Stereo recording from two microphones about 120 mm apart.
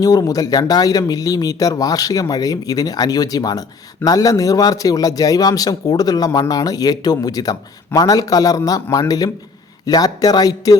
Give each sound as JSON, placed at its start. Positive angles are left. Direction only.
{"t": 0.0, "sound": "speech", "side_deg": 30}